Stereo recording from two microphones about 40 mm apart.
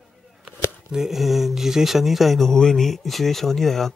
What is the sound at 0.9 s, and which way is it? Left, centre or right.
Speech, centre.